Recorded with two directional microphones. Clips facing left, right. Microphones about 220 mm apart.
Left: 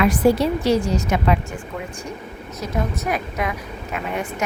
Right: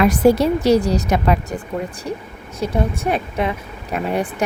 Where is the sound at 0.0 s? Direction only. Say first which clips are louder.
Right 3 dB; 40° right (ahead or behind).